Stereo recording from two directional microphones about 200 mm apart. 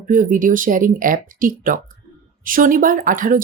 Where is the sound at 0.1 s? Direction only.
40° right (ahead or behind).